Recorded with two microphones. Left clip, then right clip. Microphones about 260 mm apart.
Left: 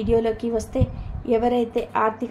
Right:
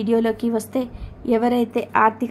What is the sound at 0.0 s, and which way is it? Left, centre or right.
A woman's voice, right.